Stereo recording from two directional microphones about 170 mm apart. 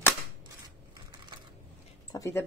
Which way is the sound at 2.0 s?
20° left (ahead or behind).